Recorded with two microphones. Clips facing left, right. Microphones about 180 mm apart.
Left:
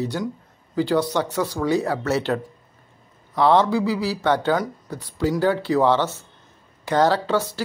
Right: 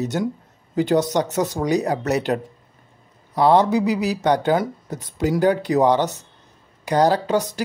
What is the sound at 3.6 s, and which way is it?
Speech, 20° right (ahead or behind).